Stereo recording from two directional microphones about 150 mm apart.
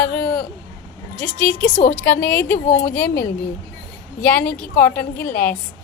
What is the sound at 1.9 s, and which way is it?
A woman's voice, 10° left (ahead or behind).